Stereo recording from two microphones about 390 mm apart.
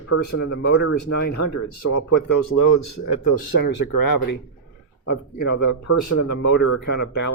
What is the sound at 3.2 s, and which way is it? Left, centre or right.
Speech, left.